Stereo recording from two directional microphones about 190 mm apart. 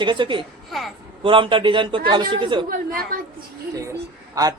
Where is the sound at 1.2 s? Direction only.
25° right (ahead or behind).